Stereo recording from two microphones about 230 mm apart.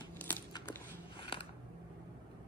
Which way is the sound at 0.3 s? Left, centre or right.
Centre.